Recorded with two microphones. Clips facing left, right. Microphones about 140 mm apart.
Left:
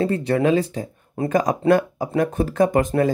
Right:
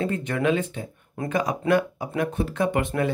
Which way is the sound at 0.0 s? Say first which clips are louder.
Left 5 dB; 35° left (ahead or behind).